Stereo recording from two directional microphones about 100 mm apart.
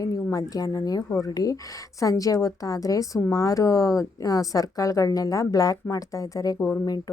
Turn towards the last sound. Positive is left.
turn(degrees=20)  # may be behind; listen again after turning